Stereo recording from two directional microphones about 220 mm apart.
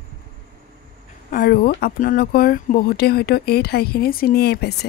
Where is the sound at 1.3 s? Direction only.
45° left (ahead or behind).